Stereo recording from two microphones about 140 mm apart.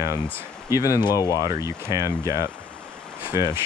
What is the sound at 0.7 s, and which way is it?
Speech, 25° left (ahead or behind).